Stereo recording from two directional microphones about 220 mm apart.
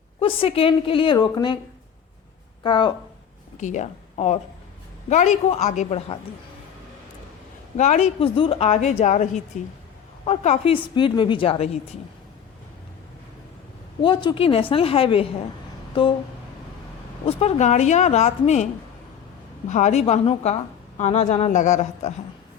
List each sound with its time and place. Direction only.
0.2 s a woman's voice: 25° left (ahead or behind)
2.6 s a woman's voice: 20° left (ahead or behind)
3.6 s a woman's voice: 35° left (ahead or behind)
7.8 s a woman's voice: 30° left (ahead or behind)
14.0 s a woman's voice: 20° left (ahead or behind)
17.2 s a woman's voice: 30° left (ahead or behind)